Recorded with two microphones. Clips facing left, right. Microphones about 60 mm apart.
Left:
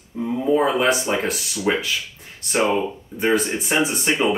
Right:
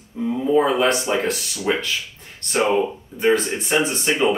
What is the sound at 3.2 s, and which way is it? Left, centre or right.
Speech, centre.